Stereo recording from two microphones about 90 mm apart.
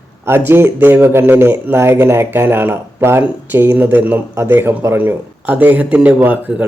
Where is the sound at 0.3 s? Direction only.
25° right (ahead or behind).